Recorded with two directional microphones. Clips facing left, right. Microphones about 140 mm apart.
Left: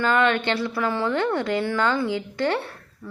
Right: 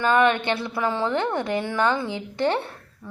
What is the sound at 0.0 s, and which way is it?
A woman's voice, 20° right (ahead or behind).